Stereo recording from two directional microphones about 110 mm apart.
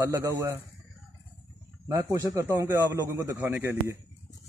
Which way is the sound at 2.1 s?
30° right (ahead or behind).